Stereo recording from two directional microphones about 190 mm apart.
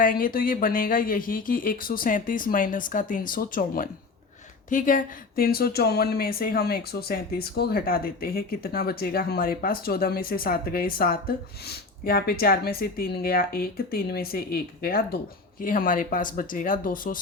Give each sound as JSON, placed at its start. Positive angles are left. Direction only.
{"t": 0.0, "sound": "speech", "side_deg": 45}